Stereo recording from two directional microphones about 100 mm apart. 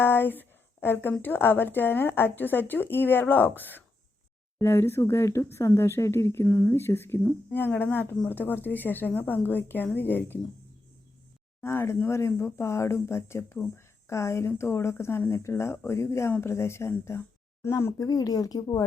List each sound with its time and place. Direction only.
0.0 s a sound: 20° left (ahead or behind)
1.2 s speech: 20° left (ahead or behind)
11.6 s speech: 25° left (ahead or behind)